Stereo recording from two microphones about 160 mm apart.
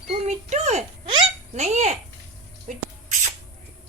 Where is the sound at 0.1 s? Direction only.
45° right (ahead or behind).